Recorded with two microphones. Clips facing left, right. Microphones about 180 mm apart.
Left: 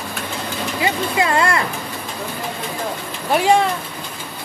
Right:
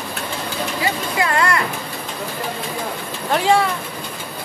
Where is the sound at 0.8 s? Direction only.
25° left (ahead or behind).